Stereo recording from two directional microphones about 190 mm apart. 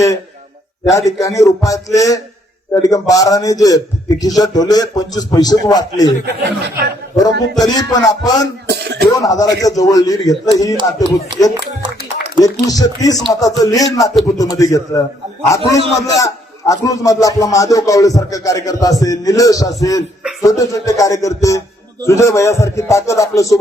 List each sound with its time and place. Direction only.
0.9 s a man's voice: 15° left (ahead or behind)
6.4 s speech: 65° right (ahead or behind)
7.6 s a man's voice: 20° left (ahead or behind)
8.6 s cough: 60° right (ahead or behind)
9.1 s a man's voice: 20° left (ahead or behind)
10.8 s speech: 25° right (ahead or behind)
12.4 s a man's voice: 20° left (ahead or behind)